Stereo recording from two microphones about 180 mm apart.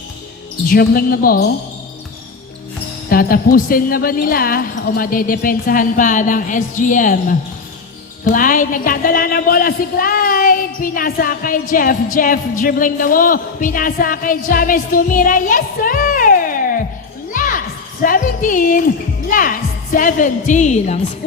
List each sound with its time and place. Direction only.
0.7 s a woman's voice: 55° left (ahead or behind)
3.1 s a woman's voice: 55° left (ahead or behind)
17.3 s a sound: 50° left (ahead or behind)
18.0 s music: 50° left (ahead or behind)
19.3 s a woman's voice: 50° left (ahead or behind)